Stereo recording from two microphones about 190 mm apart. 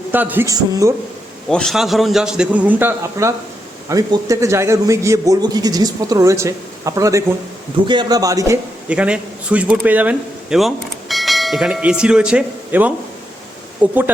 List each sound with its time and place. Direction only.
0.1 s a man's voice: 10° right (ahead or behind)
1.5 s a man's voice: centre (ahead or behind); by 8.5 s 15° right (ahead or behind)
8.9 s a man's voice: 5° right (ahead or behind)